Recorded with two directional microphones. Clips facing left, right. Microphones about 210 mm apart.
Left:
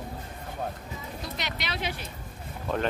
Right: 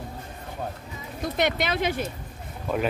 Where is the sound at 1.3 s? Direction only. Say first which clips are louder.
Right 12 dB; 50° right (ahead or behind).